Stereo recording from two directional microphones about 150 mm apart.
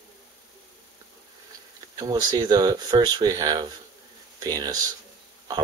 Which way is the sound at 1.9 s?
25° right (ahead or behind).